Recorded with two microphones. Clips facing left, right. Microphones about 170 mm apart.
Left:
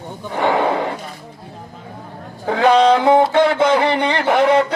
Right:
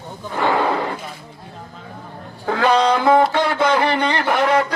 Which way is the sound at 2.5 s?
15° left (ahead or behind).